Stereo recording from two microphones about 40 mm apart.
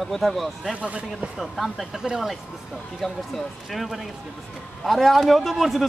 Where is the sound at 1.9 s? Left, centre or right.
Centre.